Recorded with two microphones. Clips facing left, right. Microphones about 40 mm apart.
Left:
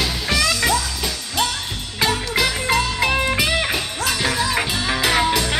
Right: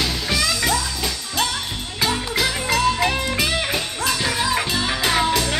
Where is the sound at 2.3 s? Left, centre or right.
Centre.